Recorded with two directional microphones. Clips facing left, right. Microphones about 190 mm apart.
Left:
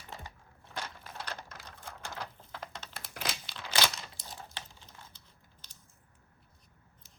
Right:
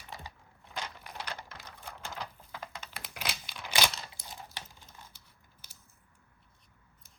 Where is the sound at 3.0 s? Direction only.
15° right (ahead or behind).